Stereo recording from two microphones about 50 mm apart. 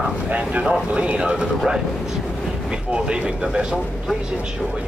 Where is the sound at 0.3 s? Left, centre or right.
Right.